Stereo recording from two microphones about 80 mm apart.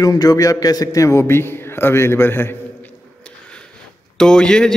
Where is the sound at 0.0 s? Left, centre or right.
Left.